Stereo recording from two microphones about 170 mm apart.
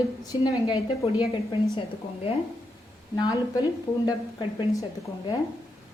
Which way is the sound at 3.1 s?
20° left (ahead or behind).